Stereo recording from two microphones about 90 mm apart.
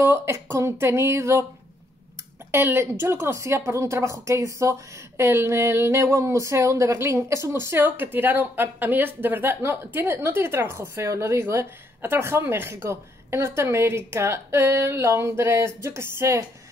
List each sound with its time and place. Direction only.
0.0 s a woman's voice: 30° right (ahead or behind)
2.5 s a woman's voice: 25° right (ahead or behind)